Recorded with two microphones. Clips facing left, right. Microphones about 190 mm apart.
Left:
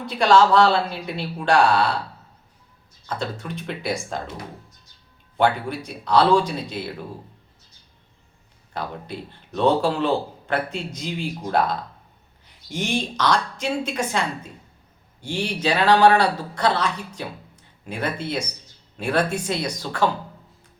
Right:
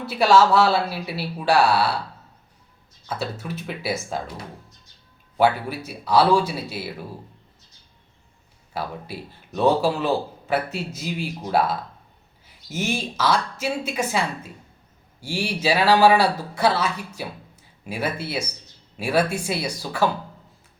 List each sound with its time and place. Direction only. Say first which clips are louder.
0.0 s speech: even; 5° right (ahead or behind)
3.1 s speech: even; 5° right (ahead or behind)
5.4 s speech: right 1 dB; 5° right (ahead or behind)
8.7 s speech: even; 5° right (ahead or behind)